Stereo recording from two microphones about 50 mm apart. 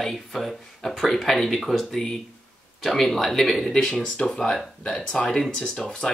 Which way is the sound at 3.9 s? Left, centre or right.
Left.